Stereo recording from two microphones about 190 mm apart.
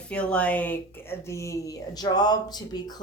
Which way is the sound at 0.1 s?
5° left (ahead or behind).